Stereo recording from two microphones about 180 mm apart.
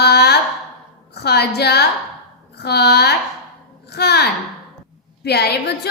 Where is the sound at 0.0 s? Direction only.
65° left (ahead or behind).